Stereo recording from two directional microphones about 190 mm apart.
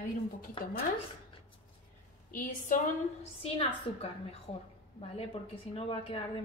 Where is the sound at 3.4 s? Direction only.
30° left (ahead or behind).